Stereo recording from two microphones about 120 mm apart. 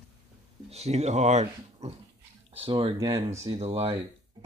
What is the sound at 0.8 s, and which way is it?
Speech, 65° right (ahead or behind).